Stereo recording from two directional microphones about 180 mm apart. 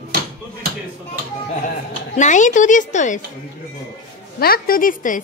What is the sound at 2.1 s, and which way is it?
Speech, 45° left (ahead or behind).